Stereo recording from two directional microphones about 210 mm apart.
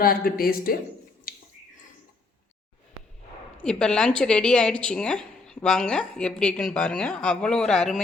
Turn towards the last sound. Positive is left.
turn(degrees=0)  # may be behind; listen again after turning